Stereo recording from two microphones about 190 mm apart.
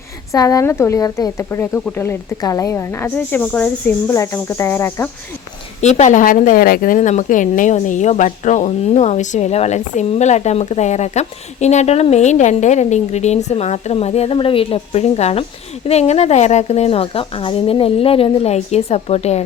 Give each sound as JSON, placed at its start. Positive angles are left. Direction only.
{"t": 0.3, "sound": "speech", "side_deg": 15}
{"t": 5.8, "sound": "speech", "side_deg": 35}